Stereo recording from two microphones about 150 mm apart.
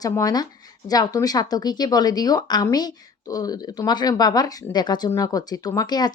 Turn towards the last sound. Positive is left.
turn(degrees=25)  # may be behind; listen again after turning